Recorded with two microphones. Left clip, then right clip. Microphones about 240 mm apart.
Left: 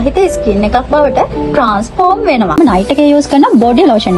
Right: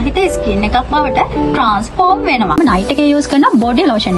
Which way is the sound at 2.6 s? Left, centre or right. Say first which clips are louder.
Left 3 dB; right.